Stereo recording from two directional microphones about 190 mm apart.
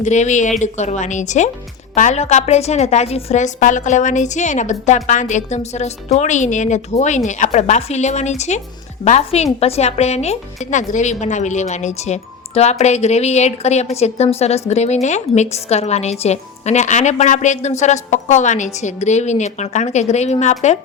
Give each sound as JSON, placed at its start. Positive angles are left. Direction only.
{"t": 0.0, "sound": "a woman's voice", "side_deg": 40}